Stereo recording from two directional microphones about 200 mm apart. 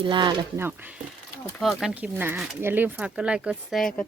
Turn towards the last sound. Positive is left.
turn(degrees=0)  # may be behind; listen again after turning